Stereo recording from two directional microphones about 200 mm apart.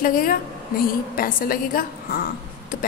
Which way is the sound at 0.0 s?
45° left (ahead or behind).